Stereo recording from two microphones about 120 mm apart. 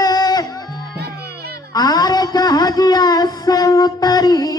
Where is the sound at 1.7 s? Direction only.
35° left (ahead or behind).